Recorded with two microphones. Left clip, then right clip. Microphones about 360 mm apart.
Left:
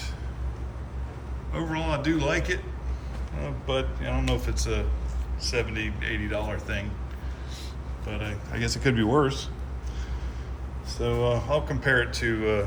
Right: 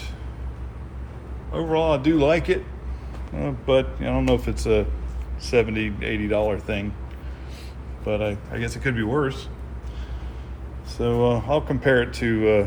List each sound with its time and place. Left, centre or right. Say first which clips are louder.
1.5 s speech: right 8 dB; centre
8.0 s speech: right 11 dB; centre
8.5 s speech: even; centre
10.8 s a sound: right 4 dB; right
11.2 s speech: right 4 dB; centre